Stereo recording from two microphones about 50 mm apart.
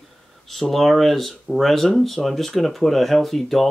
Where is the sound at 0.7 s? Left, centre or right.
Centre.